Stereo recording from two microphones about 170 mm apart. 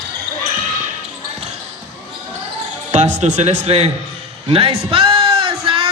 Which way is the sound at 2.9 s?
45° right (ahead or behind).